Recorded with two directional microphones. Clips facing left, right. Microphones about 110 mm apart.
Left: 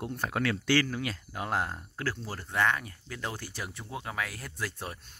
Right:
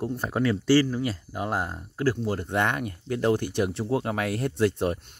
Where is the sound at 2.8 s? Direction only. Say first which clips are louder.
Right 14 dB; 45° right (ahead or behind).